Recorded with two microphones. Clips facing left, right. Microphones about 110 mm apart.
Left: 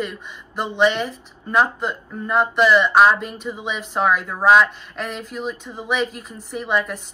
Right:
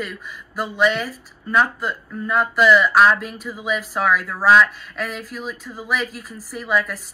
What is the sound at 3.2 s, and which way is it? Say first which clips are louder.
Speech: left 1 dB; 5° right (ahead or behind).